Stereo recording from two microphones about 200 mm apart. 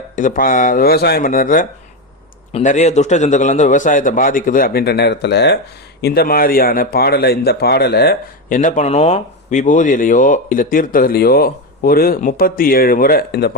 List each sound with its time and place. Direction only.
0.2 s a man's voice: 45° left (ahead or behind)